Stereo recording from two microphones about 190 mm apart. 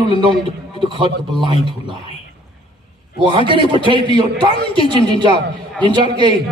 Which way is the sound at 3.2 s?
25° right (ahead or behind).